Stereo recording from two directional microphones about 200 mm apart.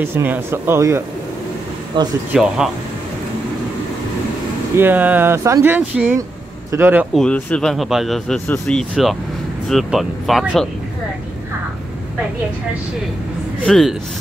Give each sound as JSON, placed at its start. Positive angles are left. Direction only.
{"t": 0.0, "sound": "speech", "side_deg": -10}
{"t": 2.3, "sound": "speech", "side_deg": -5}
{"t": 4.7, "sound": "speech", "side_deg": -10}
{"t": 7.2, "sound": "speech", "side_deg": 5}
{"t": 13.7, "sound": "speech", "side_deg": 0}